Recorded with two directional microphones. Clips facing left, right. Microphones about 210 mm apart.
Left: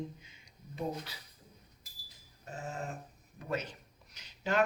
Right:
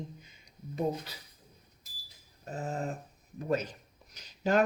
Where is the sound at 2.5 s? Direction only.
35° right (ahead or behind).